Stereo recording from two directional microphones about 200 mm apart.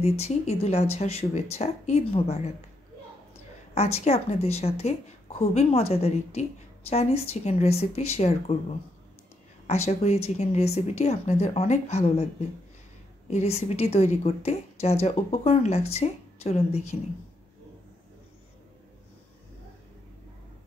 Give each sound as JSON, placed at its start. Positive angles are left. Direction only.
{"t": 0.0, "sound": "a woman's voice", "side_deg": 30}
{"t": 3.7, "sound": "a woman's voice", "side_deg": 30}
{"t": 9.7, "sound": "a woman's voice", "side_deg": 35}